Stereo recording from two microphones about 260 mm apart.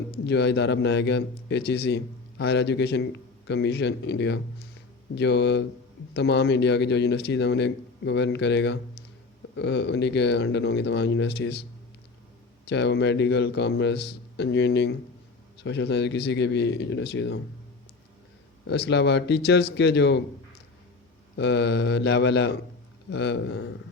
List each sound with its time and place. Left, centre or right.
0.3 s a man's voice: left
12.6 s a man's voice: left
18.7 s a man's voice: left
21.3 s a man's voice: left